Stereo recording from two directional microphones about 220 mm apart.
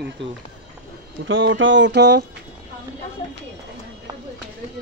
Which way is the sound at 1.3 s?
60° right (ahead or behind).